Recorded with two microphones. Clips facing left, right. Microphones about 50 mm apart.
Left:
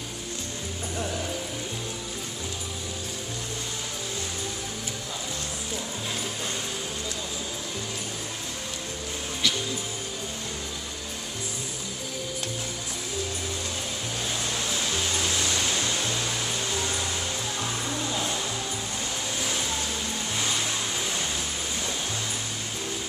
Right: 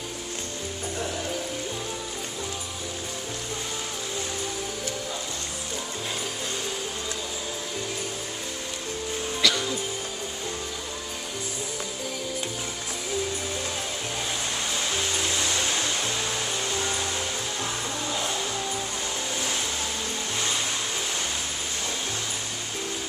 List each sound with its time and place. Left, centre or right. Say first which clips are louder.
9.4 s music: right 3 dB; right
14.7 s music: right 1 dB; centre